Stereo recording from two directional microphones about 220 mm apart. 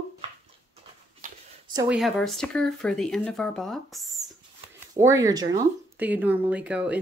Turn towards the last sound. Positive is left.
turn(degrees=-5)  # may be behind; listen again after turning